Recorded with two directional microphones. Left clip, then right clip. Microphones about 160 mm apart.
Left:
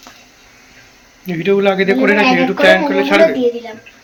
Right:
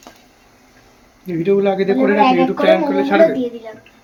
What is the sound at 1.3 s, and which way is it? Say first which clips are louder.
Speech: left 2 dB; 5° right (ahead or behind).